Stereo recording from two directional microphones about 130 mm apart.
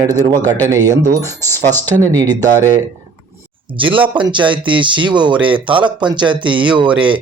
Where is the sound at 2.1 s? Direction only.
25° right (ahead or behind).